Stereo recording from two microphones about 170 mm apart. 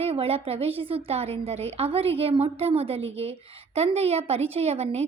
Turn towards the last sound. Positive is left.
turn(degrees=-40)  # may be behind; listen again after turning